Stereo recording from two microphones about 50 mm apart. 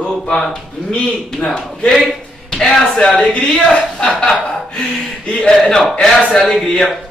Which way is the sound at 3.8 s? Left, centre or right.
Left.